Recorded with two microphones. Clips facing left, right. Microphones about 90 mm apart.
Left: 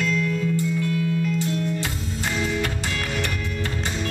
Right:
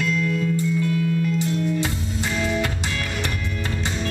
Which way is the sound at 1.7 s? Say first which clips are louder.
Right 3 dB; 20° right (ahead or behind).